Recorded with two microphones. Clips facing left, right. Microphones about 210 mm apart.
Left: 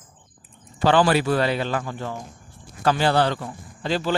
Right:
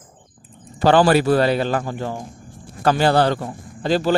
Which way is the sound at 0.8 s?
40° right (ahead or behind).